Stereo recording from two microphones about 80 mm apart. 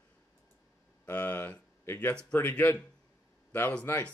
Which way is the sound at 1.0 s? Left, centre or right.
Left.